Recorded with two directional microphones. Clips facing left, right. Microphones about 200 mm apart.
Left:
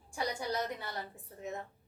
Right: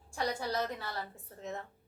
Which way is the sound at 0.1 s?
15° left (ahead or behind).